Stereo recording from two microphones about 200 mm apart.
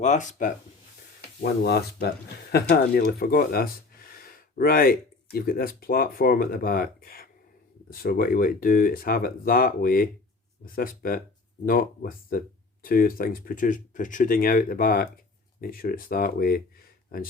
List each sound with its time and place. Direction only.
0.0 s speech: 40° left (ahead or behind)
1.4 s speech: 55° left (ahead or behind)